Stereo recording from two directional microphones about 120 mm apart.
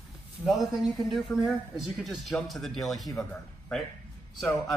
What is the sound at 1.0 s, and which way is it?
A man's voice, centre (ahead or behind).